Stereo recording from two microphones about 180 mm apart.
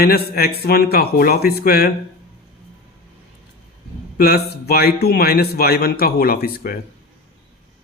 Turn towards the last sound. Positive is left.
turn(degrees=55)  # may be behind; listen again after turning